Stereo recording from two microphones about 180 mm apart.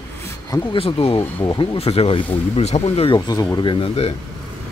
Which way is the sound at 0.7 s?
30° left (ahead or behind).